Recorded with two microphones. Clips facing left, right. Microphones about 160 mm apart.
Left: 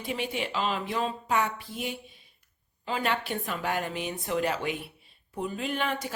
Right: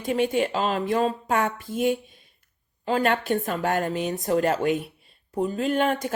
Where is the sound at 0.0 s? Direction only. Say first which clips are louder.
Right 9 dB; 50° right (ahead or behind).